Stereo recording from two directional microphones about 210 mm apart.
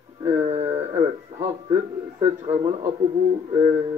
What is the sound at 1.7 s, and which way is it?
A man's voice, 30° right (ahead or behind).